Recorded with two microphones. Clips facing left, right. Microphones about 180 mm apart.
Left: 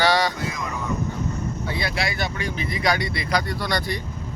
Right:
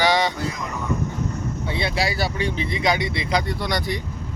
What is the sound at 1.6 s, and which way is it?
Speech, 25° right (ahead or behind).